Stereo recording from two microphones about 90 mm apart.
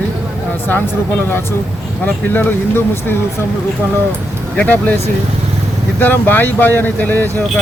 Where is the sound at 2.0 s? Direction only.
20° left (ahead or behind).